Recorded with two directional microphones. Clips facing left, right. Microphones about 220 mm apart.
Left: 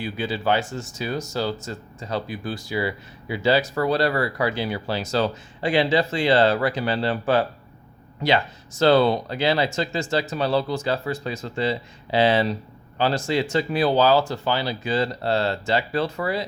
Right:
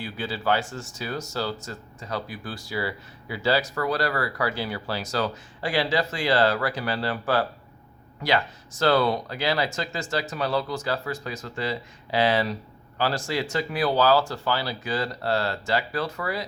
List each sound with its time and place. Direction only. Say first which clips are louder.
0.0 s speech: left 4 dB; 20° left (ahead or behind)